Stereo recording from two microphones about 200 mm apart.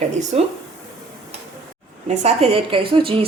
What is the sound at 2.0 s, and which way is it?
A woman's voice, 30° right (ahead or behind).